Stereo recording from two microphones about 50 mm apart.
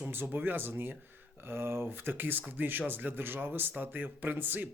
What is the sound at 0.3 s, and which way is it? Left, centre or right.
Speech, right.